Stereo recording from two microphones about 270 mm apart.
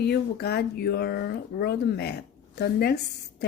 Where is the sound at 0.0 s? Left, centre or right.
Left.